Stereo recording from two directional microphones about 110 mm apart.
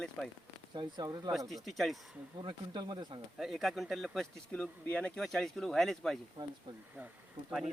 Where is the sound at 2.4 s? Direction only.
45° right (ahead or behind).